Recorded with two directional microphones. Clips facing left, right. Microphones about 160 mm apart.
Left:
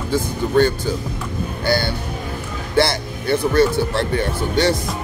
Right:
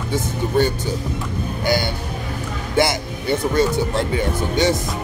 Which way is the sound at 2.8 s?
20° right (ahead or behind).